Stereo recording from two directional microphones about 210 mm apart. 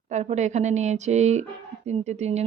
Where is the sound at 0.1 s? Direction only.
35° right (ahead or behind).